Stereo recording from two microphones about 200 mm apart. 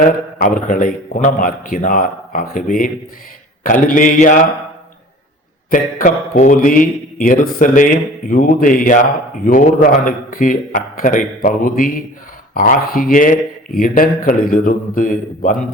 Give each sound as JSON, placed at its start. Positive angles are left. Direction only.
{"t": 0.3, "sound": "a man's voice", "side_deg": 40}
{"t": 5.7, "sound": "a man's voice", "side_deg": 40}